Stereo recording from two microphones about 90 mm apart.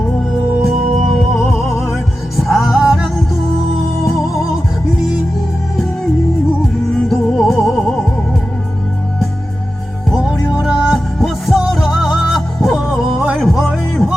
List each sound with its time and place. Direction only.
1.5 s music: centre (ahead or behind)
7.1 s music: centre (ahead or behind)
10.1 s music: 5° right (ahead or behind)